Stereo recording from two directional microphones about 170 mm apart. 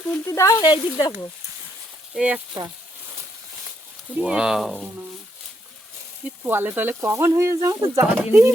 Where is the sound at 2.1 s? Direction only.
10° right (ahead or behind).